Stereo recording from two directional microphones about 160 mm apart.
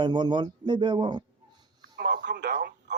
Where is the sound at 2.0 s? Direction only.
70° right (ahead or behind); by 2.7 s 90° right.